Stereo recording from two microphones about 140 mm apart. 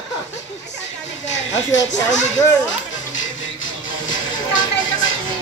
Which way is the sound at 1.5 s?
60° left (ahead or behind).